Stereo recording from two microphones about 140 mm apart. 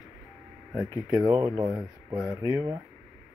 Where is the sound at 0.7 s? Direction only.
25° right (ahead or behind).